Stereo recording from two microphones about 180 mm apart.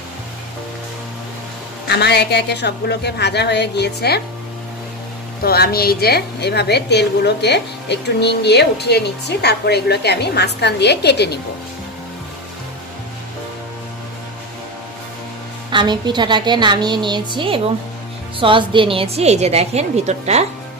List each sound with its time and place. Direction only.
1.9 s a woman's voice: 65° left (ahead or behind)
5.4 s a woman's voice: 60° left (ahead or behind)
15.7 s a woman's voice: 25° right (ahead or behind)